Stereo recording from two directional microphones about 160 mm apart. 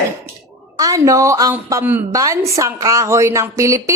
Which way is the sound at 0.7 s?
20° right (ahead or behind).